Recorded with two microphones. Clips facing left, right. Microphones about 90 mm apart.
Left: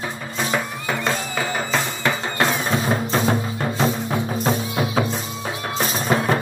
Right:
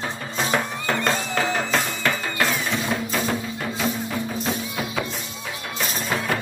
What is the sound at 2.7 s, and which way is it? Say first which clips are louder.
Music: left 4 dB; 40° left (ahead or behind).